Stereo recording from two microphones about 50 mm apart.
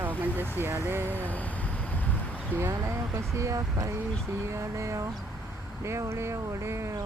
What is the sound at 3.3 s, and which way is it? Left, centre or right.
Speech, right.